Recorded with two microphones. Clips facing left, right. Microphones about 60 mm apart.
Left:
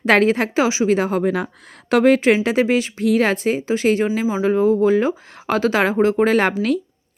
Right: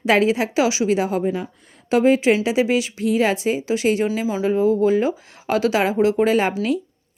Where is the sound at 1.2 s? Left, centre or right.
Left.